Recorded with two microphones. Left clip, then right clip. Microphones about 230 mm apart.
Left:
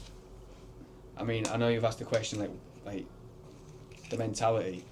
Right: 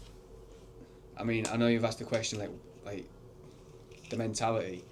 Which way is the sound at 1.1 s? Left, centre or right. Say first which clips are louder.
Even; right.